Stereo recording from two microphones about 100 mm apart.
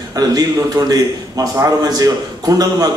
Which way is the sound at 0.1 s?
40° right (ahead or behind).